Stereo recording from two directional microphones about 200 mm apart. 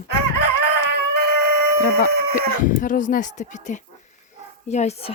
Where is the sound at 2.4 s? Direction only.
40° left (ahead or behind).